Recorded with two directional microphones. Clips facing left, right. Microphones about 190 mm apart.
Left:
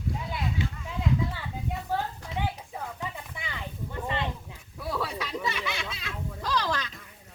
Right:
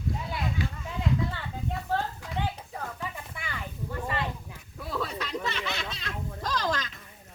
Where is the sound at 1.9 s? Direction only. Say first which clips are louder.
Right 1 dB; 10° left (ahead or behind).